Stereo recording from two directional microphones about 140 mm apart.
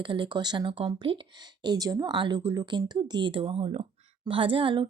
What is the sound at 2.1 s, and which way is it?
Speech, 35° right (ahead or behind).